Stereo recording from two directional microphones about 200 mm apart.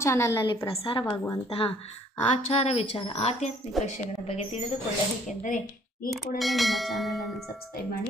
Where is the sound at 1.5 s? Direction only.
30° left (ahead or behind).